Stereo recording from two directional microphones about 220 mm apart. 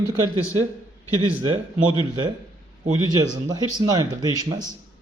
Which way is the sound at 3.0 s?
15° right (ahead or behind).